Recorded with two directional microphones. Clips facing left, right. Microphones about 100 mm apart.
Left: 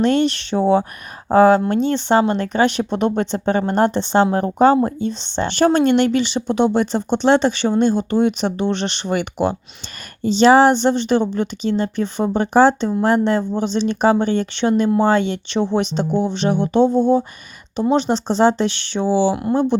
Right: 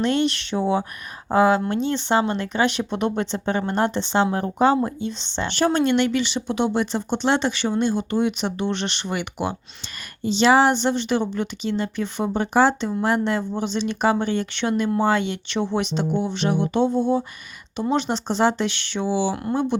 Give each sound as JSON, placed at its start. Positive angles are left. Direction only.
{"t": 0.0, "sound": "speech", "side_deg": 35}